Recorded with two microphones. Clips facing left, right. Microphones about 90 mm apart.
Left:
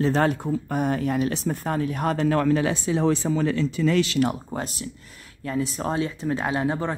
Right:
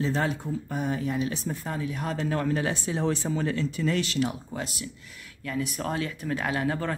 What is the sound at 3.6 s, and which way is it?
Speech, 90° left.